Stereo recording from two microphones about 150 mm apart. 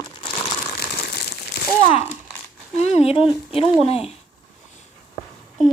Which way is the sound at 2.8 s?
45° left (ahead or behind).